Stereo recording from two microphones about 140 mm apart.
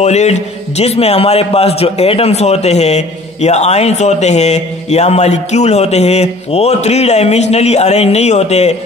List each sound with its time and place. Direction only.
0.0 s a man's voice: 55° left (ahead or behind)